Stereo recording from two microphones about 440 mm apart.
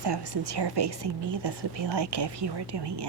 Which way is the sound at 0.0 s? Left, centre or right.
Right.